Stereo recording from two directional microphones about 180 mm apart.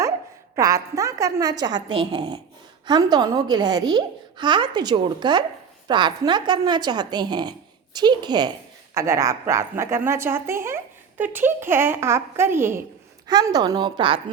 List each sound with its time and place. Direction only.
0.5 s a woman's voice: 20° right (ahead or behind)